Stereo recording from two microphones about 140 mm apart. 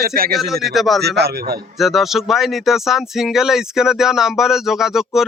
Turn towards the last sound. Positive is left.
turn(degrees=-5)  # may be behind; listen again after turning